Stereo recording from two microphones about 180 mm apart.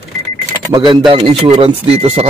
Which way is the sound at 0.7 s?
25° right (ahead or behind).